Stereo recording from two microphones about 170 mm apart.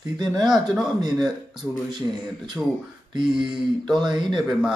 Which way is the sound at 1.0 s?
25° right (ahead or behind).